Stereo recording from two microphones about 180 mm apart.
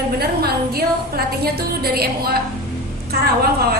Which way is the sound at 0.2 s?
60° right (ahead or behind).